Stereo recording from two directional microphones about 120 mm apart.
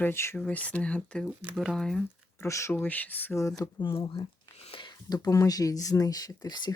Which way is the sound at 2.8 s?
15° left (ahead or behind).